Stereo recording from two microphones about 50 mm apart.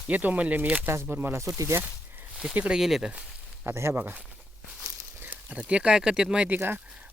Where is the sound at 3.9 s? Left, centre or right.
Right.